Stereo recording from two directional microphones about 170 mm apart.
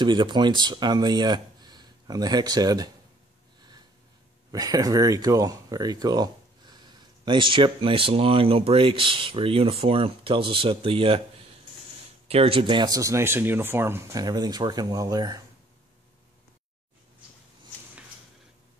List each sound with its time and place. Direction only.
0.0 s speech: 25° right (ahead or behind)
4.5 s speech: 20° right (ahead or behind)
12.3 s speech: 35° right (ahead or behind)